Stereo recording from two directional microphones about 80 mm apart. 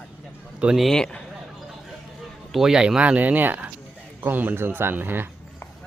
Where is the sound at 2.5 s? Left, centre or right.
Centre; by 5.3 s right.